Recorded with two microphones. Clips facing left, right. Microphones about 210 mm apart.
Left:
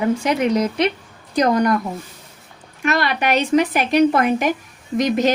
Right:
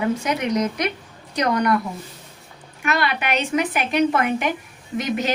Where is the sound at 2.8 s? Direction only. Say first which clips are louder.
Left 3 dB; 40° left (ahead or behind).